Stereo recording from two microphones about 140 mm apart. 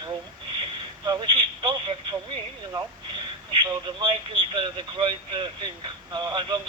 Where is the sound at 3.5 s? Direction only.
30° right (ahead or behind).